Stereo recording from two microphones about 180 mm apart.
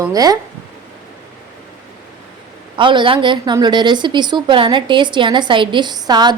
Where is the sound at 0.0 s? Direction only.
20° right (ahead or behind).